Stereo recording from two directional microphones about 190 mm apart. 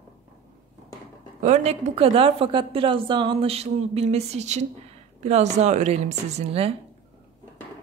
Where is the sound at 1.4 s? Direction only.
35° right (ahead or behind).